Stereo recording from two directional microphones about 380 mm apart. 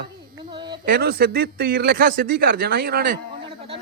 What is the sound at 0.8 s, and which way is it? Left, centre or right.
A man's voice, right.